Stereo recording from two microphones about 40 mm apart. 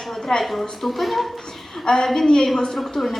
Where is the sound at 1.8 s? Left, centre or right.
Centre.